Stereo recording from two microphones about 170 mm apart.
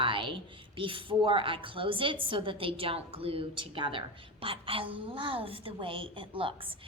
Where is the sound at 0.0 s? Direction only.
30° right (ahead or behind).